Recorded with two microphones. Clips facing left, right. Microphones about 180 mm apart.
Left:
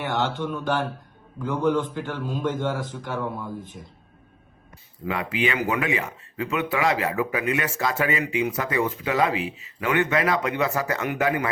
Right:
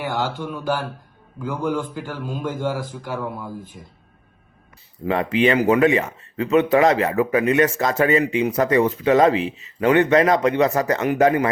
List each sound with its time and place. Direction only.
0.0 s a man's voice: 5° right (ahead or behind)
5.0 s speech: 35° right (ahead or behind)